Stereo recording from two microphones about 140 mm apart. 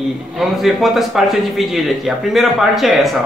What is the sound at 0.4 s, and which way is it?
A man's voice, centre (ahead or behind).